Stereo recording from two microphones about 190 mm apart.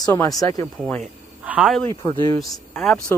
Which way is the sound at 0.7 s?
5° left (ahead or behind).